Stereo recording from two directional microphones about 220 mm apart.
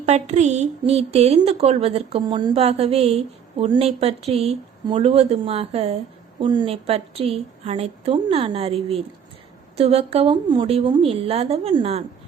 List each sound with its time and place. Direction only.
0.0 s a woman's voice: 30° right (ahead or behind)